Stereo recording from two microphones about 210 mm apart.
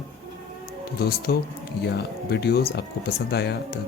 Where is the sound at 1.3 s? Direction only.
45° left (ahead or behind).